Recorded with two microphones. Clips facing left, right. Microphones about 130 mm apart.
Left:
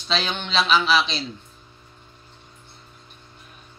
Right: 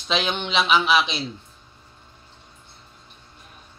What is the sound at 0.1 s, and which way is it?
Speech, 20° right (ahead or behind).